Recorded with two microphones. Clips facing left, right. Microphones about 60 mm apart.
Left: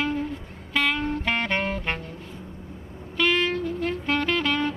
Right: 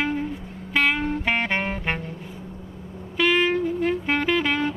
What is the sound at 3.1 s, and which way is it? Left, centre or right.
Music, centre.